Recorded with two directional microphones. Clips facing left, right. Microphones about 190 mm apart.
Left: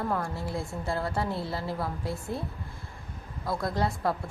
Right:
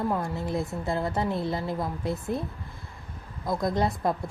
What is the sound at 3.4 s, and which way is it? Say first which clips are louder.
Speech: right 3 dB; 20° right (ahead or behind).